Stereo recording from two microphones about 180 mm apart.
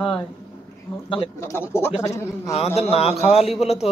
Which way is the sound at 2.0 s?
15° left (ahead or behind).